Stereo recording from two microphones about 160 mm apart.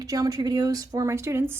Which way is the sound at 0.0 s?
25° right (ahead or behind).